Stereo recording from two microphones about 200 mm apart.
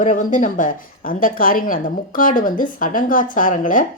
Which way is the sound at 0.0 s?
40° left (ahead or behind).